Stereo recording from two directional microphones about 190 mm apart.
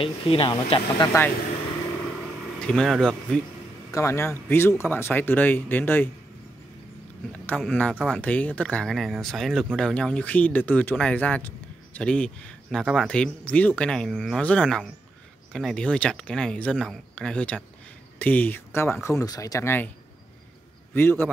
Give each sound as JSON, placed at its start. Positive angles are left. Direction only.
{"t": 0.0, "sound": "speech", "side_deg": 30}
{"t": 1.1, "sound": "speech", "side_deg": 15}
{"t": 2.6, "sound": "speech", "side_deg": 5}
{"t": 3.9, "sound": "speech", "side_deg": 15}
{"t": 7.3, "sound": "speech", "side_deg": 5}
{"t": 20.9, "sound": "speech", "side_deg": 10}